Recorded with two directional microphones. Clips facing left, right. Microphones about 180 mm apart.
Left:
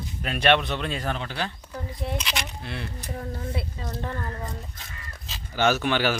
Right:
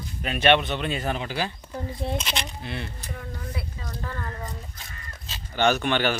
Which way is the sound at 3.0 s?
35° left (ahead or behind).